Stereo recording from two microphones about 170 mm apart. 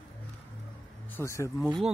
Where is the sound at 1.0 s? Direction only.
15° left (ahead or behind).